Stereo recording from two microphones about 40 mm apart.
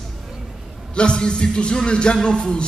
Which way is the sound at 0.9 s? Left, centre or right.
Left.